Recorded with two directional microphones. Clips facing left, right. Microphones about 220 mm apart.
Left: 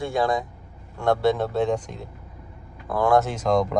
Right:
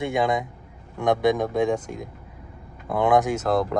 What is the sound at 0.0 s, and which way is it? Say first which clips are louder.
A man's voice: even; 20° right (ahead or behind).